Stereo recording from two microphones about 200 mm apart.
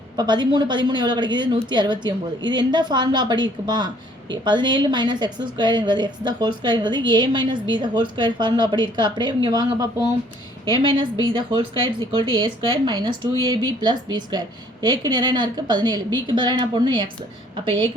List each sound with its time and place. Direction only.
0.2 s a woman's voice: 20° right (ahead or behind)